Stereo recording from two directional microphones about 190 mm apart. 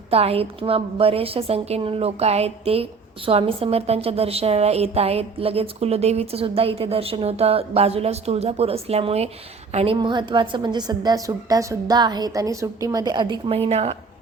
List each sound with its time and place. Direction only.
0.1 s a woman's voice: 30° right (ahead or behind)